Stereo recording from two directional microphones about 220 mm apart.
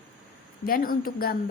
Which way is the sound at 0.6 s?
40° left (ahead or behind).